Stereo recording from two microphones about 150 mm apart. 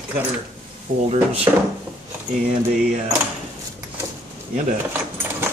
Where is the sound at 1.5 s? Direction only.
25° right (ahead or behind).